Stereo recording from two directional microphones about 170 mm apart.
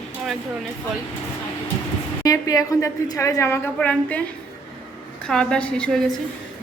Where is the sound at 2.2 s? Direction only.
20° left (ahead or behind).